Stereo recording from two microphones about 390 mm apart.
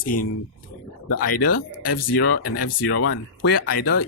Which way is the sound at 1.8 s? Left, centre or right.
Left.